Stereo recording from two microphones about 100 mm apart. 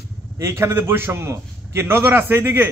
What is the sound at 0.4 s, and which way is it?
A man's voice, 25° right (ahead or behind).